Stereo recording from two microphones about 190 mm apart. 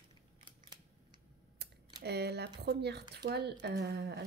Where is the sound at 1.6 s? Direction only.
60° right (ahead or behind).